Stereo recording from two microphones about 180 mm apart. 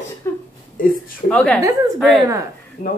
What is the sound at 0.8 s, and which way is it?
Speech, 50° left (ahead or behind).